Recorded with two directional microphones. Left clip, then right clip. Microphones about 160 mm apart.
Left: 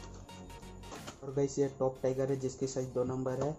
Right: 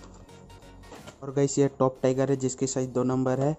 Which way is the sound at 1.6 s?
55° right (ahead or behind).